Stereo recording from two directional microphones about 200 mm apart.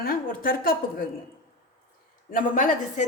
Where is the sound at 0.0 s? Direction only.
45° left (ahead or behind).